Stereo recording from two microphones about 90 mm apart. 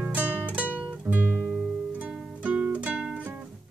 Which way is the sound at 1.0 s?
20° right (ahead or behind).